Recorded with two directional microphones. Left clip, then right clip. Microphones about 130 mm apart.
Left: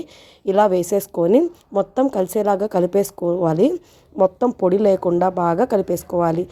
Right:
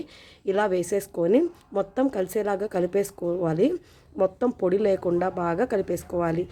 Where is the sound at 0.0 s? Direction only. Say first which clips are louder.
Left 5 dB; 35° left (ahead or behind).